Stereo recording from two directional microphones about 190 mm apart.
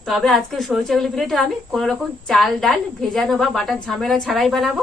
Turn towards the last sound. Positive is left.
turn(degrees=0)  # may be behind; listen again after turning